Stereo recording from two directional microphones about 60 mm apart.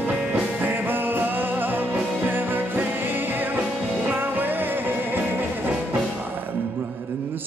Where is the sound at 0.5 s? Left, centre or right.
Right.